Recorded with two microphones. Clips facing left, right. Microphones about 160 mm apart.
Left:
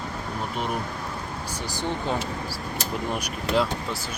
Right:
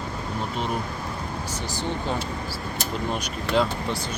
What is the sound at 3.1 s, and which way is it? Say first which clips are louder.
Speech: right 1 dB; 5° left (ahead or behind).